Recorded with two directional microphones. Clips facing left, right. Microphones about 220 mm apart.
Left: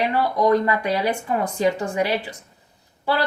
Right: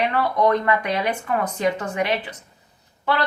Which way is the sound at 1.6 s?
30° left (ahead or behind).